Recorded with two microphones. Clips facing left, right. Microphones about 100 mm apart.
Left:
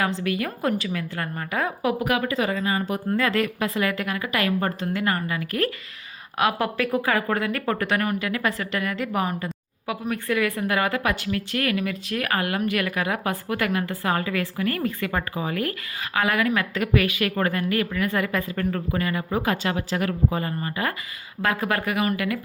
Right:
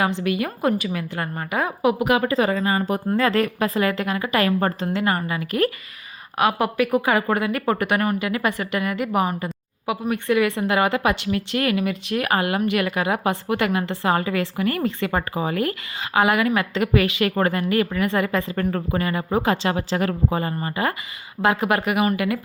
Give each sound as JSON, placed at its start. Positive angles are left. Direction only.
{"t": 0.2, "sound": "a woman's voice", "side_deg": -15}
{"t": 2.0, "sound": "speech", "side_deg": -30}
{"t": 6.4, "sound": "speech", "side_deg": -5}
{"t": 18.6, "sound": "speech", "side_deg": -40}